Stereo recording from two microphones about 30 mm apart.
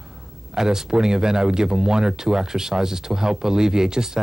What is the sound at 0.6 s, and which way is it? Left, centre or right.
Speech, centre.